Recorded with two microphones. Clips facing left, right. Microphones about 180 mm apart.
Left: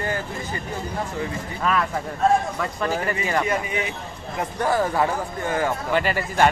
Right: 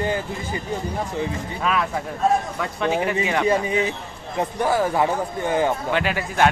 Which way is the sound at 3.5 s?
30° right (ahead or behind).